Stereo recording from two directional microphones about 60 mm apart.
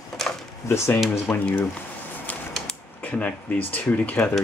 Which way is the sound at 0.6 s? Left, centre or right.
Left.